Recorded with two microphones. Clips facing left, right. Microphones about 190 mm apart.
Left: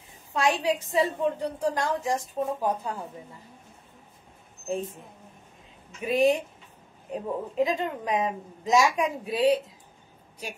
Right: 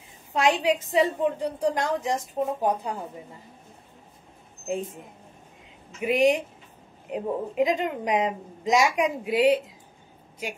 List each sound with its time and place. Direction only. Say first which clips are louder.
0.3 s a woman's voice: right 3 dB; 20° right (ahead or behind)
5.9 s a woman's voice: right 1 dB; 15° right (ahead or behind)